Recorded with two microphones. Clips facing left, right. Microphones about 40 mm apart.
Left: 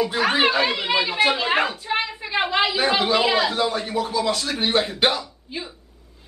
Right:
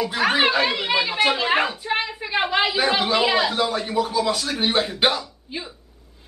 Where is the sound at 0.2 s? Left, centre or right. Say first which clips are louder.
Right 1 dB; centre.